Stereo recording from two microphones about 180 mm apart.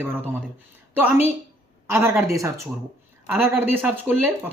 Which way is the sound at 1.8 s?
15° right (ahead or behind).